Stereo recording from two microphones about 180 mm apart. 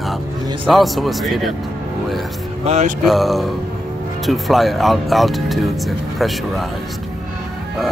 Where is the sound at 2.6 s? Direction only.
35° right (ahead or behind).